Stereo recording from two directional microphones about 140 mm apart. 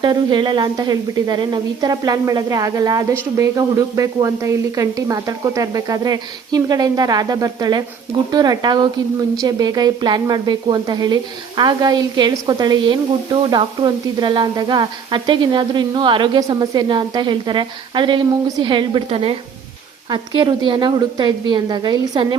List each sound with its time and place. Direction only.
0.0 s speech: 30° right (ahead or behind)